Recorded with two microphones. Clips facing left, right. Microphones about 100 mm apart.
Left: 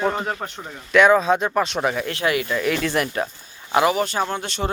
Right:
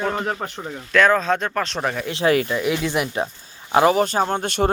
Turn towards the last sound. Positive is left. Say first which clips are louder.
# right 4 dB
turn(degrees=-50)  # may be behind; listen again after turning